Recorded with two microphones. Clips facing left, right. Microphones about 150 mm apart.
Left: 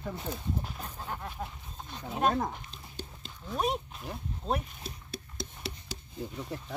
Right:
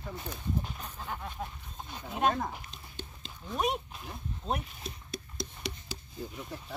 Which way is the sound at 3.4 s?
5° right (ahead or behind).